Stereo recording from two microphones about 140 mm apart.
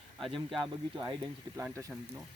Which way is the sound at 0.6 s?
35° right (ahead or behind).